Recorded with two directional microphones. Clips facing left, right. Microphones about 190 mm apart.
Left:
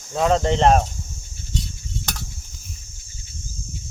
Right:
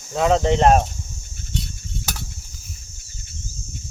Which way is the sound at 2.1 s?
5° right (ahead or behind).